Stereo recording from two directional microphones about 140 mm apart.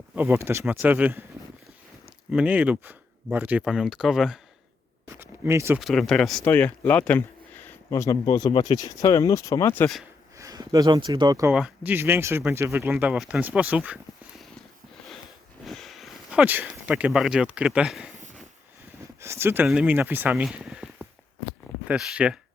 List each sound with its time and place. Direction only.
0.2 s speech: 15° right (ahead or behind)
2.3 s speech: 10° right (ahead or behind)
5.0 s a sound: 20° right (ahead or behind)
5.8 s speech: centre (ahead or behind); by 9.9 s 15° left (ahead or behind)
10.3 s speech: 25° right (ahead or behind)
11.5 s speech: 10° right (ahead or behind)
13.1 s speech: centre (ahead or behind)
15.6 s speech: centre (ahead or behind)
19.2 s speech: 20° right (ahead or behind)